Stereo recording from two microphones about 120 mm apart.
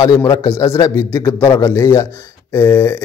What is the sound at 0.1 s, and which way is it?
A man's voice, 25° left (ahead or behind).